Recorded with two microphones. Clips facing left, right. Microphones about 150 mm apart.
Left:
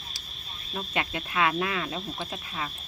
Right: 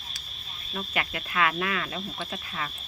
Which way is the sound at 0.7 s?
25° left (ahead or behind).